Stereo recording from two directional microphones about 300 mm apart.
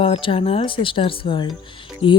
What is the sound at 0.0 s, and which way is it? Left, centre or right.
Speech, centre.